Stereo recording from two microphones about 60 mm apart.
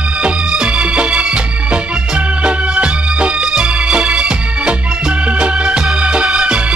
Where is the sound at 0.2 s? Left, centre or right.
Centre.